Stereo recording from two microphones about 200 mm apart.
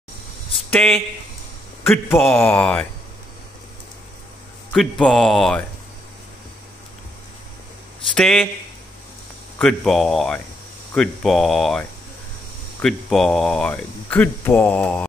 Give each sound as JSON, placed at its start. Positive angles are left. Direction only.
{"t": 0.7, "sound": "speech", "side_deg": 0}
{"t": 4.7, "sound": "speech", "side_deg": 0}
{"t": 8.1, "sound": "speech", "side_deg": 5}
{"t": 9.6, "sound": "speech", "side_deg": 0}
{"t": 12.8, "sound": "speech", "side_deg": 0}